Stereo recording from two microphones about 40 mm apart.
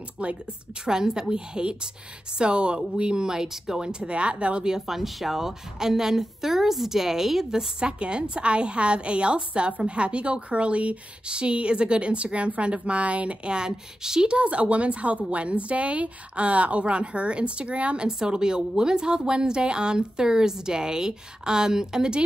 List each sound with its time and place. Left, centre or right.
0.2 s a woman's voice: right; by 3.9 s centre
3.9 s a woman's voice: right
4.6 s a woman's voice: centre
7.5 s a woman's voice: right